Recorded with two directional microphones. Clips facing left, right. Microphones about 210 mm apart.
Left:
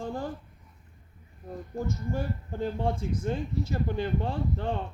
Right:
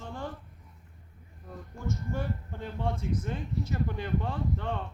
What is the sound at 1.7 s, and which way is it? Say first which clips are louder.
Speech: left 3 dB; 35° left (ahead or behind).